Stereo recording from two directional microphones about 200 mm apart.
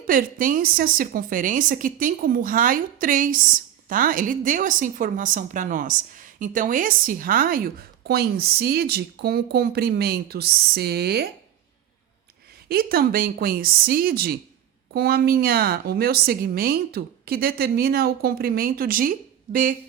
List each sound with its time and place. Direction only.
0.1 s a woman's voice: 45° right (ahead or behind)
12.6 s a woman's voice: 50° right (ahead or behind)